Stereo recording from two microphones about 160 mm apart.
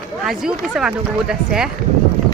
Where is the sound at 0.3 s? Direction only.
5° right (ahead or behind).